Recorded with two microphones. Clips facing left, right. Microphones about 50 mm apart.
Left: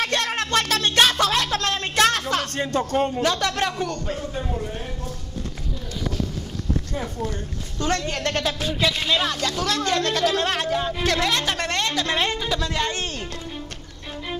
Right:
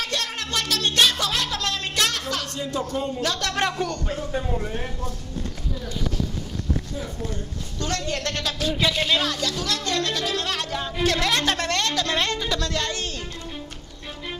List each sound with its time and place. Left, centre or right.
0.0 s music: left
2.5 s speech: left
3.2 s speech: centre
3.6 s speech: centre
7.8 s speech: left
8.7 s speech: centre
9.2 s speech: left
10.3 s speech: left
10.7 s a woman's voice: centre
11.2 s speech: centre
11.5 s a woman's voice: left